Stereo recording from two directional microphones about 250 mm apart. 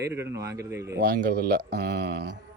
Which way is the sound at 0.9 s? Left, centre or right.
Right.